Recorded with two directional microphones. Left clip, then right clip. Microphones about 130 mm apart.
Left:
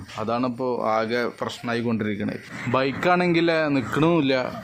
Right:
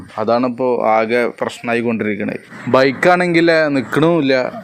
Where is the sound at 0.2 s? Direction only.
45° right (ahead or behind).